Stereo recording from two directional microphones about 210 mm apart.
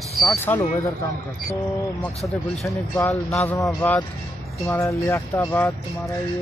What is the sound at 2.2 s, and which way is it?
Speech, 10° left (ahead or behind).